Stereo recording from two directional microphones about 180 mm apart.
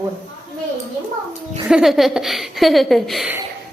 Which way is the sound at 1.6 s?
5° right (ahead or behind).